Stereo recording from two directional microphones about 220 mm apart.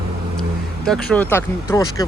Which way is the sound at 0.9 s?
5° left (ahead or behind).